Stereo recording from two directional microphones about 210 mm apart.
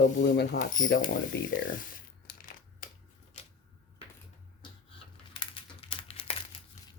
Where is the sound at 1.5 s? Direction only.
40° left (ahead or behind).